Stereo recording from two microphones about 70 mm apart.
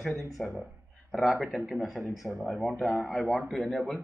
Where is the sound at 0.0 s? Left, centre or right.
Centre.